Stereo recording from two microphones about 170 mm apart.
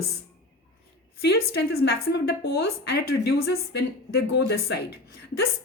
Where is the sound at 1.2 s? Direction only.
70° left (ahead or behind).